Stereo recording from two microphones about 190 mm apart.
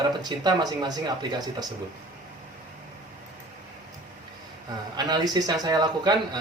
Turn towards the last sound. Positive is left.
turn(degrees=-20)  # may be behind; listen again after turning